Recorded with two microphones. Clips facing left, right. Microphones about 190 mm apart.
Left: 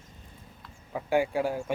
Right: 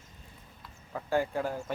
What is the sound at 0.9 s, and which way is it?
Speech, 15° left (ahead or behind).